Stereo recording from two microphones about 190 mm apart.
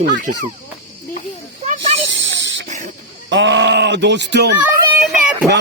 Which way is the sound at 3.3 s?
70° right (ahead or behind).